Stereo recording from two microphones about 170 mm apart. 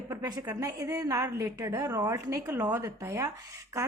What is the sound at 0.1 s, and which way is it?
A woman's voice, 20° right (ahead or behind).